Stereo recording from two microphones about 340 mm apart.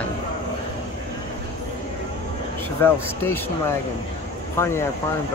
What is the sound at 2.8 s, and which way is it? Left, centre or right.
Speech, centre.